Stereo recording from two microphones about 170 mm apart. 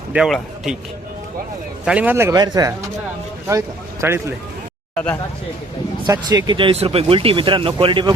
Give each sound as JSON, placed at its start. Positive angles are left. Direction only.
{"t": 0.1, "sound": "a man's voice", "side_deg": -5}
{"t": 1.8, "sound": "speech", "side_deg": -5}
{"t": 4.0, "sound": "speech", "side_deg": -15}
{"t": 6.1, "sound": "speech", "side_deg": -20}